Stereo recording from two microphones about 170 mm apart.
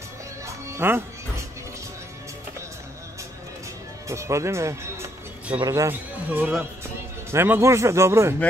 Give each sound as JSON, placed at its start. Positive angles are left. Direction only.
{"t": 0.7, "sound": "music", "side_deg": -15}
{"t": 4.1, "sound": "speech", "side_deg": -15}